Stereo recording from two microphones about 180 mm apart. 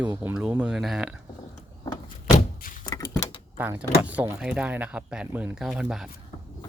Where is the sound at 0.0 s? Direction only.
20° right (ahead or behind).